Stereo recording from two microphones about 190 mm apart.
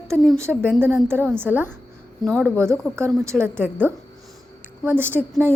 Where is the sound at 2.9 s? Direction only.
15° right (ahead or behind).